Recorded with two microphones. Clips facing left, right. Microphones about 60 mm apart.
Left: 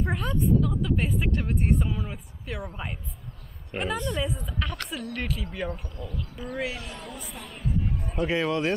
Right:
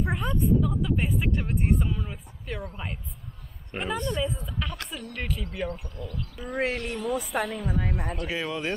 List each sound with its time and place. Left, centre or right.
0.0 s a woman's voice: centre
6.5 s speech: right
7.0 s speech: centre
7.3 s a woman's voice: right
8.2 s speech: centre